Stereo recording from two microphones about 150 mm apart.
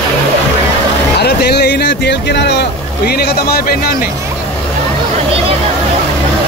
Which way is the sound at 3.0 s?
90° left.